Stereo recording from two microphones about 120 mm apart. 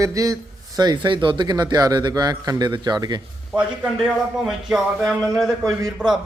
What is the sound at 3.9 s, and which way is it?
A man's voice, centre (ahead or behind).